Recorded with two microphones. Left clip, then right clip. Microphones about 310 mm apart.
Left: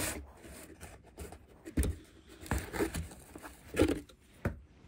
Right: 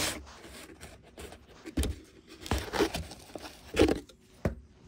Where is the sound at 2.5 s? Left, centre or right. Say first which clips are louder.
Right 6 dB; right.